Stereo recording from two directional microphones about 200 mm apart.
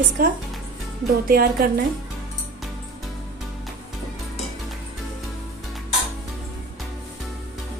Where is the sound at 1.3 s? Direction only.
45° right (ahead or behind).